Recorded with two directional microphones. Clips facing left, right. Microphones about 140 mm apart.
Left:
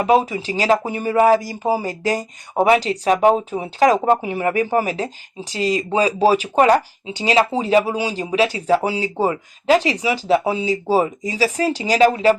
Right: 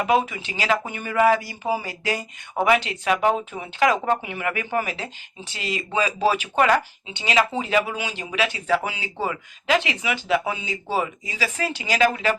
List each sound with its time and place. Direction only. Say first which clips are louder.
0.0 s speech: left 5 dB; 35° left (ahead or behind)